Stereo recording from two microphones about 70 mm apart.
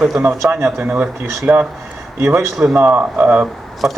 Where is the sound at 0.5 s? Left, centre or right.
Right.